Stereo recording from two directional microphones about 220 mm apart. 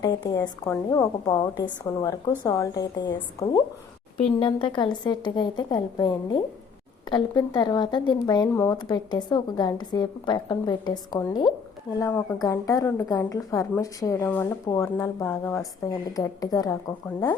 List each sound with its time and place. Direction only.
0.0 s speech: 20° left (ahead or behind)